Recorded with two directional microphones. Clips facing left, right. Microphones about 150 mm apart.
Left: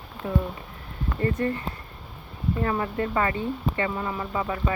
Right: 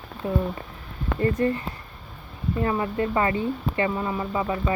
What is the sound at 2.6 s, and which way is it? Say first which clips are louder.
Speech: right 3 dB; 15° right (ahead or behind).